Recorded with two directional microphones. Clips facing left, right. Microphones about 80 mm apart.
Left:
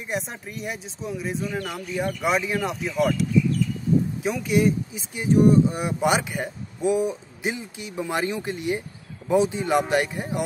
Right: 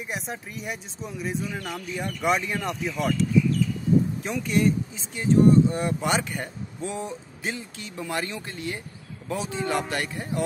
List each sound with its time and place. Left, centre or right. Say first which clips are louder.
0.1 s speech: left 5 dB; centre; by 10.4 s left